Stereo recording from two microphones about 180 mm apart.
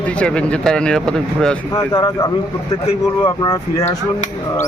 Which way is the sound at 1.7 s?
20° left (ahead or behind).